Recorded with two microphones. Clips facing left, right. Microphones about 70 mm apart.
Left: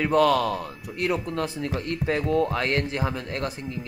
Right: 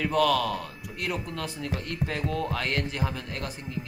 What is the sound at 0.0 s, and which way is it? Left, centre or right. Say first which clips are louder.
A man's voice: left 4 dB; left.